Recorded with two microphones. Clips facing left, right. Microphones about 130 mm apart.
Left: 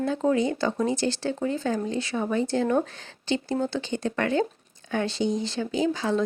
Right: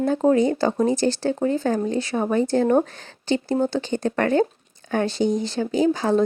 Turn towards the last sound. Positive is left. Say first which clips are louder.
# right 5 dB
turn(degrees=-45)  # may be behind; listen again after turning